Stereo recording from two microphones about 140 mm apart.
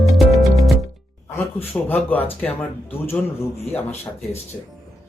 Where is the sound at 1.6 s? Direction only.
10° left (ahead or behind).